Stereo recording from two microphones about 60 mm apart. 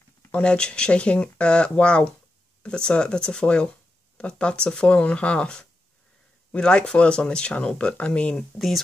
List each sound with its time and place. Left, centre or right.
0.3 s speech: centre
8.4 s speech: centre